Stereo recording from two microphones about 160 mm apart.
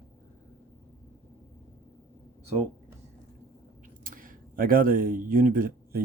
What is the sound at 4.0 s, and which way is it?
Speech, 60° right (ahead or behind).